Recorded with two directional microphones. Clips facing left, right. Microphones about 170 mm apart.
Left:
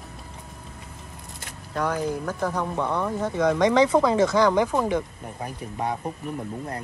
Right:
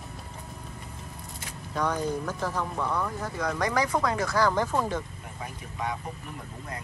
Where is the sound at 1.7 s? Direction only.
5° left (ahead or behind).